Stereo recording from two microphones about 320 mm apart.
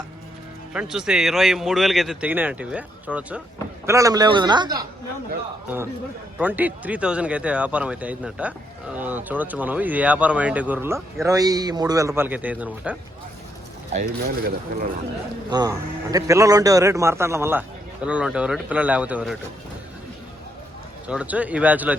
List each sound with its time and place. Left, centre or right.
0.7 s a man's voice: centre
13.9 s speech: right
15.4 s a man's voice: centre
21.1 s speech: centre